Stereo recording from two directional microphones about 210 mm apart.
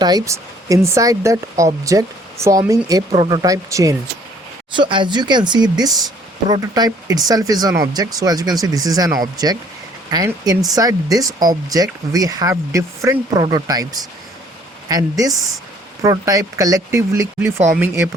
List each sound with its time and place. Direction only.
0.0 s speech: 15° right (ahead or behind)